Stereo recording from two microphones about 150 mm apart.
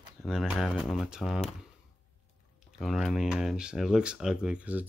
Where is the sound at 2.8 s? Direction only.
Centre (ahead or behind).